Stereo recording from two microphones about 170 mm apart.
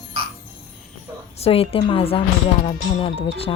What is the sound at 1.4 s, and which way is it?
Speech, 35° left (ahead or behind).